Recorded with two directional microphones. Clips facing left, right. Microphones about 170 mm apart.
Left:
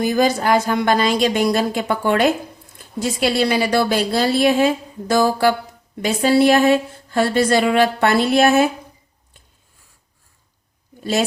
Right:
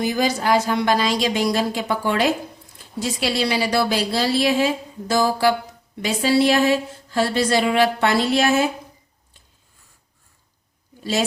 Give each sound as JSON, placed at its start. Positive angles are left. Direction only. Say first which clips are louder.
{"t": 0.0, "sound": "a woman's voice", "louder": "left 4 dB", "side_deg": 50}